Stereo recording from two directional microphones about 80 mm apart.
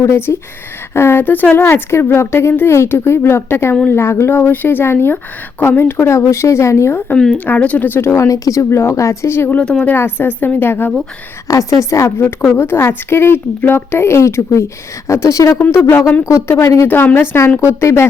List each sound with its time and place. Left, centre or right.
0.0 s speech: left
7.3 s speech: centre
8.1 s speech: left
9.6 s a woman's voice: centre
9.9 s speech: left
11.4 s speech: left
15.9 s speech: left
16.5 s speech: left
16.9 s speech: left